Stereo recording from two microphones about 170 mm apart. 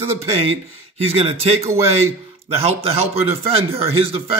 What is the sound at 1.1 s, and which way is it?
Speech, 35° right (ahead or behind).